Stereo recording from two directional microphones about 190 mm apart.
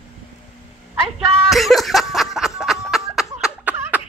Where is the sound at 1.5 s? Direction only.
Centre (ahead or behind).